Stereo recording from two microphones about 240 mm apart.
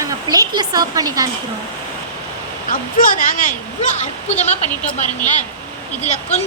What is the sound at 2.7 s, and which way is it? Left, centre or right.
Speech, left.